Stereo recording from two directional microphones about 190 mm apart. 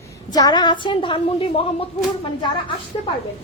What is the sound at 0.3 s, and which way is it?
A woman's voice, 20° left (ahead or behind).